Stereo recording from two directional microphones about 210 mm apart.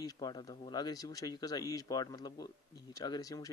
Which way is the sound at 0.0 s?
20° left (ahead or behind).